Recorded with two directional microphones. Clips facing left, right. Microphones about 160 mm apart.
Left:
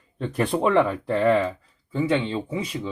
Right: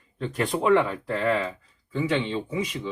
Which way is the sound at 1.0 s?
30° left (ahead or behind).